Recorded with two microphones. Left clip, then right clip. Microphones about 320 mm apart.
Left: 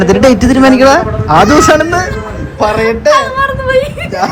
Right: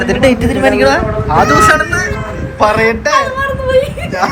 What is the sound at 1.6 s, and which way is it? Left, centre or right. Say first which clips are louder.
Speech: left 2 dB; centre.